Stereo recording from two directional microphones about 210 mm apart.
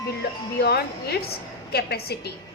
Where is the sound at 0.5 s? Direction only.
50° left (ahead or behind).